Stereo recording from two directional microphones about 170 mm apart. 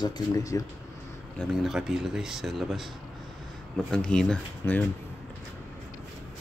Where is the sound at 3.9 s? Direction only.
5° left (ahead or behind).